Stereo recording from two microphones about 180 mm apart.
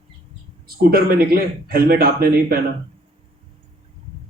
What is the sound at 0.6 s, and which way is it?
Speech, 55° right (ahead or behind).